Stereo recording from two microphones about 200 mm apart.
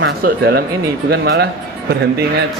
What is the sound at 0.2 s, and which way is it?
A man's voice, 50° right (ahead or behind).